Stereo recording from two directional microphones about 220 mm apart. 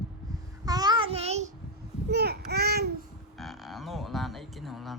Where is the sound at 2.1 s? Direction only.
45° right (ahead or behind).